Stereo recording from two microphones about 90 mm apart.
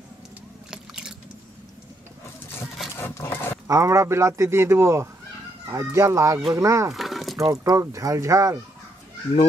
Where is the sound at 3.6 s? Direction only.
35° right (ahead or behind).